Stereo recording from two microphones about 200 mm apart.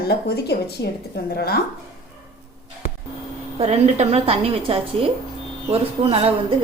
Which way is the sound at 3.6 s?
35° right (ahead or behind).